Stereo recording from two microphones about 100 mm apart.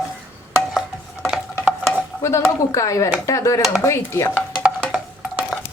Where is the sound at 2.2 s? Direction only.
30° left (ahead or behind).